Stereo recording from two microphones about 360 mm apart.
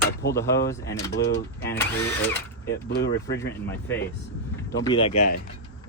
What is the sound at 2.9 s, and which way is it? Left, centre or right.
Speech, left.